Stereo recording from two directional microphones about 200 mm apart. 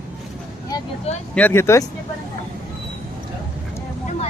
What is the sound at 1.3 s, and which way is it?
Speech, 10° left (ahead or behind).